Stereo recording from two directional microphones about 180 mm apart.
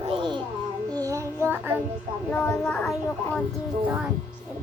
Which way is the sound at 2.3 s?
5° left (ahead or behind).